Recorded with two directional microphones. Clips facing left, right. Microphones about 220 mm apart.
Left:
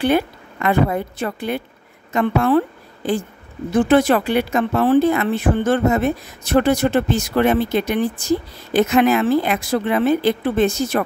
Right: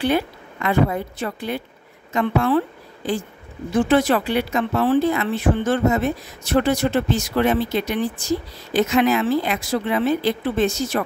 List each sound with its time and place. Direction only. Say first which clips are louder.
0.0 s a woman's voice: left 3 dB; 55° left (ahead or behind)
3.9 s speech: left 3 dB; 55° left (ahead or behind)